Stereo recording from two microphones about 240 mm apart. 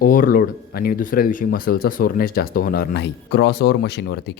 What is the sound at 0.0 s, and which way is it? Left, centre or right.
Speech, left.